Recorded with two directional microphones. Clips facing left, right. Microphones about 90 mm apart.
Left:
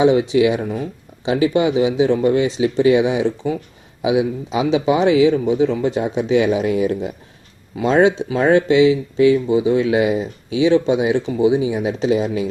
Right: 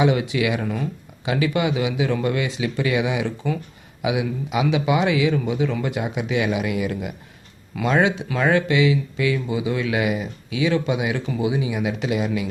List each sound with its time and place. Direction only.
0.0 s speech: 25° left (ahead or behind)